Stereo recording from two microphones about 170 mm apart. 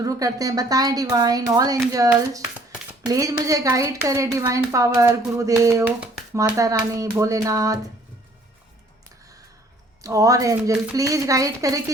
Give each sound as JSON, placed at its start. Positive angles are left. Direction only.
{"t": 0.0, "sound": "a woman's voice", "side_deg": -20}
{"t": 10.0, "sound": "speech", "side_deg": -20}